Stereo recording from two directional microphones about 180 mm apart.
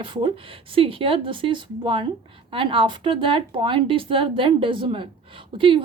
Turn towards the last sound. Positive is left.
turn(degrees=-30)  # may be behind; listen again after turning